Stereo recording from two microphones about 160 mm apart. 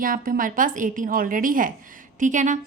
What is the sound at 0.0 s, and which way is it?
Speech, 60° right (ahead or behind).